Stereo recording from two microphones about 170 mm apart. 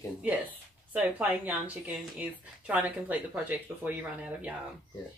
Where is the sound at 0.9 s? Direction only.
10° right (ahead or behind).